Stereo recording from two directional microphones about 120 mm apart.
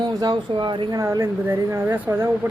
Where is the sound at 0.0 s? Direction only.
35° right (ahead or behind).